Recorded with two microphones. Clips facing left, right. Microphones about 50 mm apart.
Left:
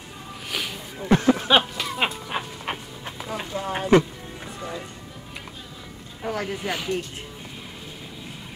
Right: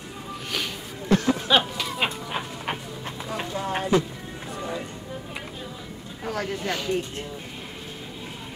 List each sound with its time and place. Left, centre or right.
1.0 s a sound: centre
1.8 s music: centre
6.2 s speech: centre